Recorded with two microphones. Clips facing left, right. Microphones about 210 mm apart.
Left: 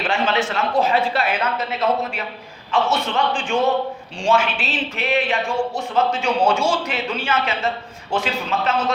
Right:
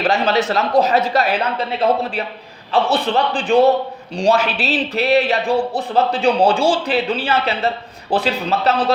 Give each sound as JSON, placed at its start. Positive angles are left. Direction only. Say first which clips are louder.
{"t": 0.0, "sound": "speech", "louder": "right 4 dB", "side_deg": -40}